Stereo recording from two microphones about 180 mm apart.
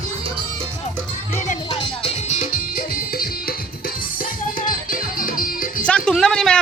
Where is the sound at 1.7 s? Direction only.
30° left (ahead or behind); by 5.8 s 50° left (ahead or behind).